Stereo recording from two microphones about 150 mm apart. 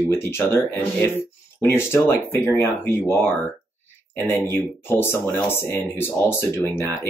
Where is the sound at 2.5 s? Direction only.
15° left (ahead or behind).